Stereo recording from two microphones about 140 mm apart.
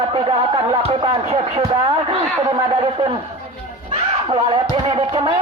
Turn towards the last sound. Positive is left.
turn(degrees=-35)  # may be behind; listen again after turning